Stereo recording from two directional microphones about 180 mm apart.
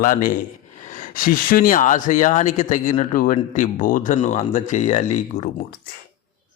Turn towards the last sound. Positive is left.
turn(degrees=40)  # may be behind; listen again after turning